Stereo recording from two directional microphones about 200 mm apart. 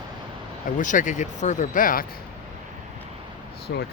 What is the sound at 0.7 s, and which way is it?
Speech, 40° left (ahead or behind).